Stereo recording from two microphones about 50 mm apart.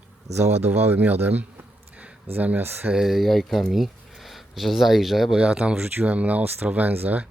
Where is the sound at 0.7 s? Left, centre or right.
Right.